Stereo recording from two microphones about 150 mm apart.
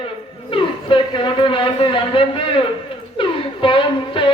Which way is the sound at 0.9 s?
35° left (ahead or behind).